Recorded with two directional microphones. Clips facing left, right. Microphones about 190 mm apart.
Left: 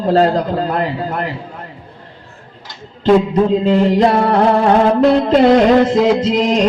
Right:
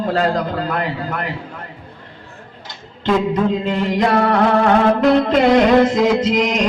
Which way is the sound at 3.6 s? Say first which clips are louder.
Left 6 dB; 35° left (ahead or behind).